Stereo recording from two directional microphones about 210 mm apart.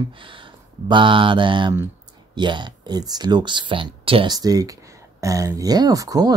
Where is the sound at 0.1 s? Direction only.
25° right (ahead or behind).